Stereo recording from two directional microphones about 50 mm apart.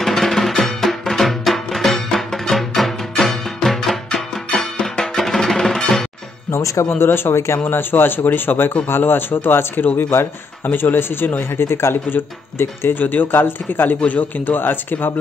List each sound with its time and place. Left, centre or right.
0.0 s music: centre
6.5 s speech: left
6.9 s speech: left
11.6 s speech: left
13.0 s a man's voice: left